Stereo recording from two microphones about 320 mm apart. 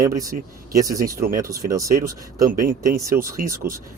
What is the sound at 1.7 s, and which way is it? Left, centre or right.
Speech, centre.